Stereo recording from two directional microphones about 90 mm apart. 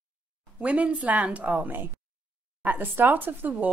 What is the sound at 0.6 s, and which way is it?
A woman's voice, 15° right (ahead or behind).